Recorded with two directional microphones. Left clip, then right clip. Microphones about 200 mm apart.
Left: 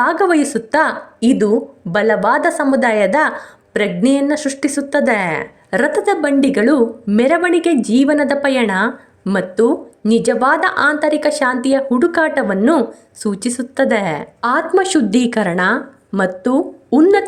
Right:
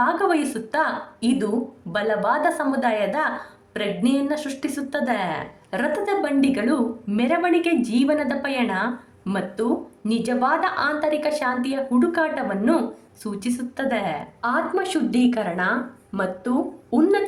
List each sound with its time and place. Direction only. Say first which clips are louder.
0.0 s a woman's voice: left 7 dB; 40° left (ahead or behind)